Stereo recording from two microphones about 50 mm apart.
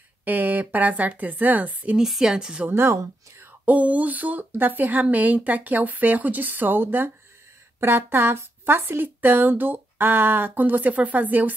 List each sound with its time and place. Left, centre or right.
0.2 s speech: right
2.0 s a woman's voice: centre
3.6 s speech: right